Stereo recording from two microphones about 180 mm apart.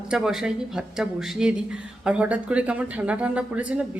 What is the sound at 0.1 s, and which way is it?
Speech, 5° right (ahead or behind).